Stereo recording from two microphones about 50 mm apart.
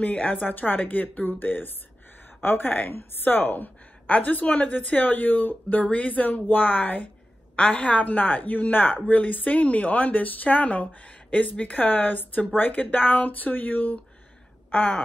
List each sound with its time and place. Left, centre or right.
0.0 s a woman's voice: left